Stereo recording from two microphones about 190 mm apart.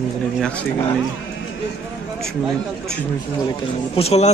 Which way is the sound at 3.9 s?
35° left (ahead or behind).